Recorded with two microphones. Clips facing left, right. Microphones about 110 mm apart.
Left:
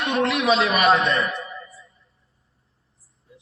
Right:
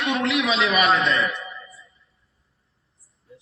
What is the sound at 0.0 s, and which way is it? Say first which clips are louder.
A man's voice: left 1 dB; 45° left (ahead or behind).